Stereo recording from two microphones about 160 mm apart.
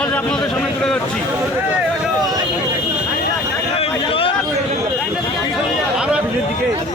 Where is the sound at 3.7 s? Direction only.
35° left (ahead or behind).